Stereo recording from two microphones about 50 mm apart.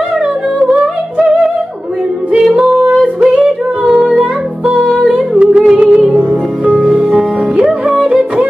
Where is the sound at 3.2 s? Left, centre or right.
Centre.